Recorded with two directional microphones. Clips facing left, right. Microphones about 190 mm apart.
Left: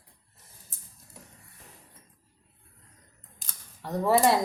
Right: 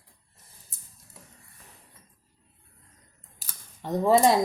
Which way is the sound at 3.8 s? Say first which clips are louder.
Right 3 dB; 20° right (ahead or behind).